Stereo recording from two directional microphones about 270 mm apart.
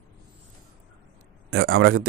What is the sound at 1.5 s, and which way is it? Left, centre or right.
Speech, right.